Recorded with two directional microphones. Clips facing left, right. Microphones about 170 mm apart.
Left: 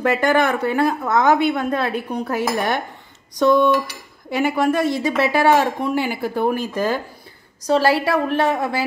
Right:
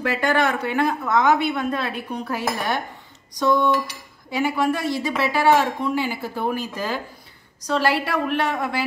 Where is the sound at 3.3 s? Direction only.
60° left (ahead or behind).